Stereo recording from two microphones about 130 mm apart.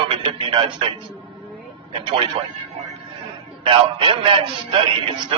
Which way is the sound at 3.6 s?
40° right (ahead or behind).